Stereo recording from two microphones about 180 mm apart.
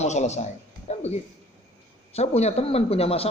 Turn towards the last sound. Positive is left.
turn(degrees=35)  # may be behind; listen again after turning